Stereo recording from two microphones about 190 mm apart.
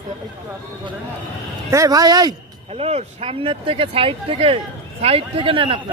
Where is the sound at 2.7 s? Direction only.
35° right (ahead or behind).